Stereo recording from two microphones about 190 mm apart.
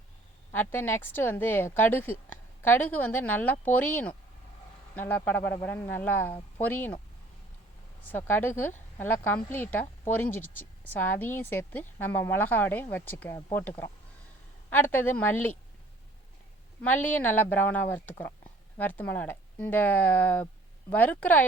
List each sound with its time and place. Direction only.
0.5 s a woman's voice: 10° left (ahead or behind)
8.0 s a woman's voice: 10° left (ahead or behind)
16.8 s a woman's voice: 10° left (ahead or behind)